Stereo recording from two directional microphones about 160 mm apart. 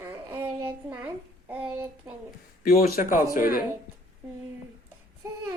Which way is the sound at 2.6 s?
65° left (ahead or behind).